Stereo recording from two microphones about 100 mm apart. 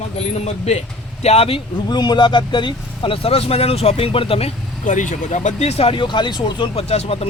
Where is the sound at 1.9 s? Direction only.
45° left (ahead or behind); by 4.5 s 80° left.